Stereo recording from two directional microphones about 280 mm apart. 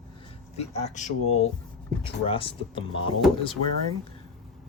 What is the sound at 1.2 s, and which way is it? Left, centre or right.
Speech, left.